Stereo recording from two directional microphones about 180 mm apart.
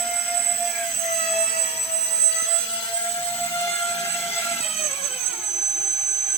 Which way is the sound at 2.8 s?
30° left (ahead or behind).